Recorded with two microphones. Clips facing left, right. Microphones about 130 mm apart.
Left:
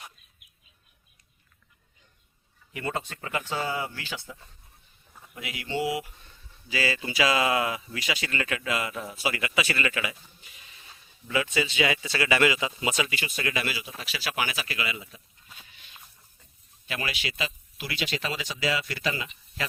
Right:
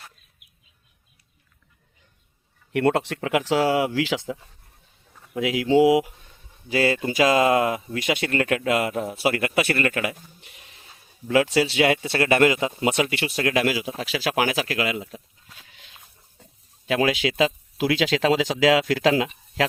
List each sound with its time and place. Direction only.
2.7 s speech: 70° right (ahead or behind); by 6.1 s 90° right
6.7 s speech: 55° right (ahead or behind)
10.4 s toilet flush: 65° right (ahead or behind)
10.8 s a sound: 45° right (ahead or behind)
11.3 s a man's voice: 80° right
15.5 s a sound: 90° right
18.2 s speech: 90° right